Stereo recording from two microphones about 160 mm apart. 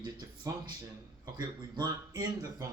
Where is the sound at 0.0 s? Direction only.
30° right (ahead or behind).